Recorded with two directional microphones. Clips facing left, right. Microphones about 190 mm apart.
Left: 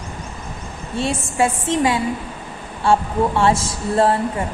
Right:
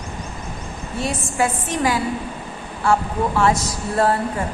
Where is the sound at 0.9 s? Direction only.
25° left (ahead or behind).